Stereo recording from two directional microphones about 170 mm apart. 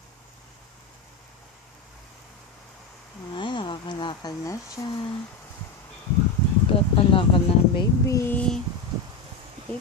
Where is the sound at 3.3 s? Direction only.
30° left (ahead or behind).